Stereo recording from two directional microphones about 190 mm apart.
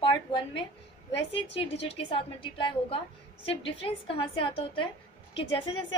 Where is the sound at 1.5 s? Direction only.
30° left (ahead or behind).